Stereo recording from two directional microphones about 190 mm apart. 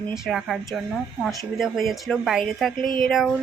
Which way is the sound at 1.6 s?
Centre (ahead or behind).